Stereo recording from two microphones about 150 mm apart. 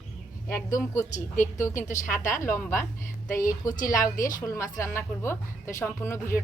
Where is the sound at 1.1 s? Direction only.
55° left (ahead or behind).